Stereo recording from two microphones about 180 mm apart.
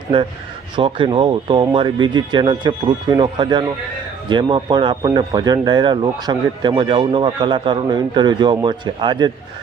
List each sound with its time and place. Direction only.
0.1 s speech: 30° right (ahead or behind)